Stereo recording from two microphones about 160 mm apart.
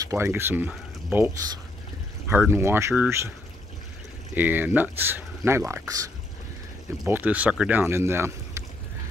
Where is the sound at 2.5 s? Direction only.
15° right (ahead or behind).